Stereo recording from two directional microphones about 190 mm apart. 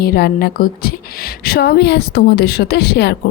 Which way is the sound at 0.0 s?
55° left (ahead or behind).